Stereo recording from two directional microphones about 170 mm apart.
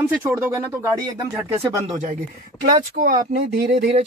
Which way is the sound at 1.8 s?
45° right (ahead or behind).